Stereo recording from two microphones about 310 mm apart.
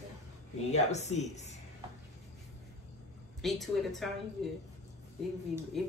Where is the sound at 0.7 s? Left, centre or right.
Left.